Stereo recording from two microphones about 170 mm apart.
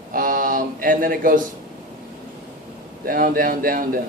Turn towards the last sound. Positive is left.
turn(degrees=-55)  # may be behind; listen again after turning